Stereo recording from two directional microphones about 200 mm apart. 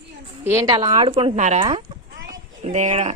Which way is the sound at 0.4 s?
15° right (ahead or behind).